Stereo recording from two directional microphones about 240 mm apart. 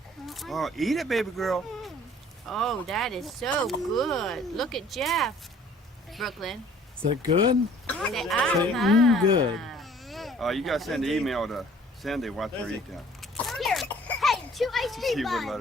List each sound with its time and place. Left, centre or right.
0.3 s speech: centre
7.9 s speech: centre
13.2 s a sound: centre